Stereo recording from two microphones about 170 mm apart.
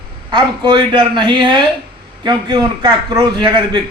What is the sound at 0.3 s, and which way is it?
Speech, 25° right (ahead or behind).